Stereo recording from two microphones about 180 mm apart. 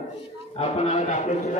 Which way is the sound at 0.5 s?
35° left (ahead or behind).